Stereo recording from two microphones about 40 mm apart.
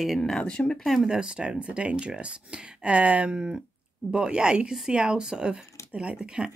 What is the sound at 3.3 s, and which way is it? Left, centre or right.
A woman's voice, centre.